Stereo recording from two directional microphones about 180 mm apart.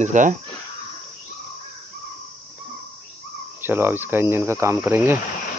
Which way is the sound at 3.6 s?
10° right (ahead or behind).